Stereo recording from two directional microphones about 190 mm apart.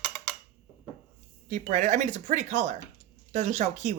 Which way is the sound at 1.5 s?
40° right (ahead or behind).